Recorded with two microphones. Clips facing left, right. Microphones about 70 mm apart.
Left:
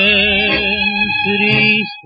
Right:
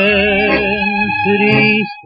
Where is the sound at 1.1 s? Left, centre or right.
Centre.